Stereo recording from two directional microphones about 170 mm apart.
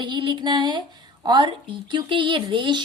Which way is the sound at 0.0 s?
25° right (ahead or behind).